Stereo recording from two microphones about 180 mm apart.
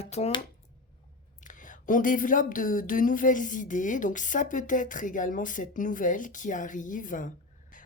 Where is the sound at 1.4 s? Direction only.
45° left (ahead or behind).